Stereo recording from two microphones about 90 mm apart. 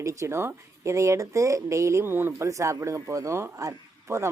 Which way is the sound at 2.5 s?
35° right (ahead or behind).